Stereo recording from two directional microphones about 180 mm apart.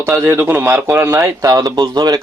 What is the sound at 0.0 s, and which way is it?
A man's voice, 15° right (ahead or behind).